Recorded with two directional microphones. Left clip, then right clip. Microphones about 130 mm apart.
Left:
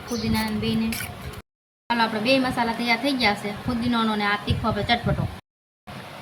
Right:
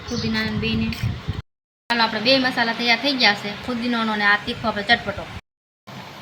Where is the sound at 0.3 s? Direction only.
30° left (ahead or behind).